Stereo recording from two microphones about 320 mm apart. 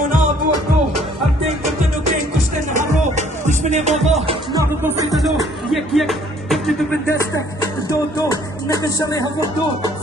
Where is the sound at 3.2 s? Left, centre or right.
Right.